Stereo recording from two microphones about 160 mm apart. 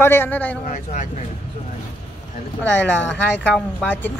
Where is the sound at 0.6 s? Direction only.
60° left (ahead or behind).